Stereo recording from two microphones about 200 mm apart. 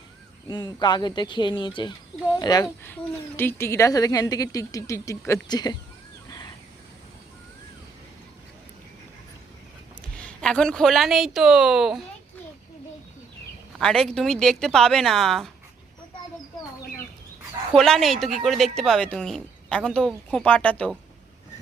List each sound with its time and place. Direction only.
0.4 s speech: 20° left (ahead or behind)
2.8 s speech: 10° left (ahead or behind)
10.2 s a woman's voice: 5° left (ahead or behind)
13.7 s a woman's voice: 5° left (ahead or behind)
17.7 s a woman's voice: centre (ahead or behind)